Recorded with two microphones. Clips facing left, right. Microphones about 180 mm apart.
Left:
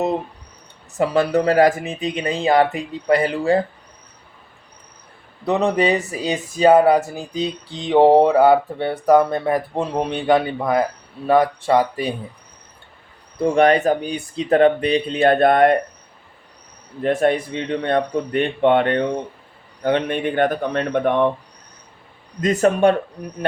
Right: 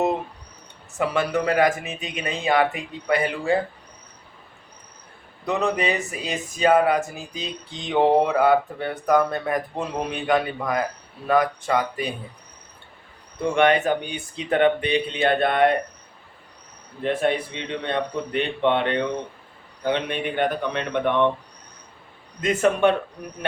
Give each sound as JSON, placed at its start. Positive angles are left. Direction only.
{"t": 0.9, "sound": "speech", "side_deg": 35}
{"t": 5.5, "sound": "speech", "side_deg": 30}
{"t": 13.4, "sound": "speech", "side_deg": 35}
{"t": 17.0, "sound": "speech", "side_deg": 45}
{"t": 22.4, "sound": "speech", "side_deg": 40}